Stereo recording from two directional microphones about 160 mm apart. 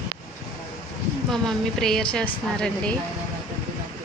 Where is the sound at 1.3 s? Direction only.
5° left (ahead or behind).